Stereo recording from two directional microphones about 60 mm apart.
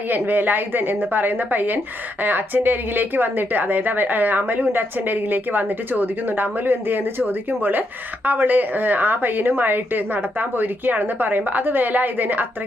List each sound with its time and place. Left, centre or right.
0.1 s a woman's voice: right